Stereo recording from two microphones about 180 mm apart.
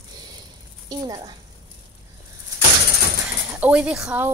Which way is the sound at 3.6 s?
5° right (ahead or behind).